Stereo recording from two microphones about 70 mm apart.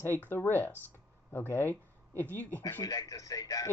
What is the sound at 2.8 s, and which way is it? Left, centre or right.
Speech, left.